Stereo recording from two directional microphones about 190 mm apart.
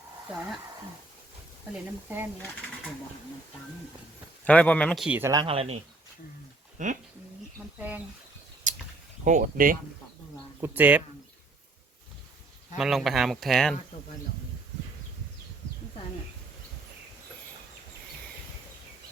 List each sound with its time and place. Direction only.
2.0 s speech: 10° right (ahead or behind)
4.4 s a man's voice: 5° left (ahead or behind)
5.0 s speech: 10° right (ahead or behind)
5.3 s speech: 25° right (ahead or behind)
6.8 s speech: 40° right (ahead or behind)
7.8 s speech: 10° right (ahead or behind)
8.7 s a sound: 40° right (ahead or behind)
9.2 s speech: 45° right (ahead or behind)
10.6 s speech: 10° right (ahead or behind)
12.7 s speech: centre (ahead or behind)